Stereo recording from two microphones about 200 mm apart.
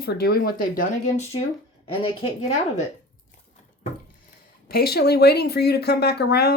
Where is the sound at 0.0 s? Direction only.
55° left (ahead or behind).